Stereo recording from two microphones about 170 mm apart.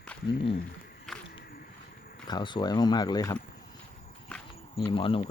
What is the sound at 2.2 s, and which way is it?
Speech, 25° left (ahead or behind).